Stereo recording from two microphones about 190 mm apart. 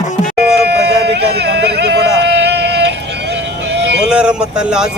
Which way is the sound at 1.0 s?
60° right (ahead or behind).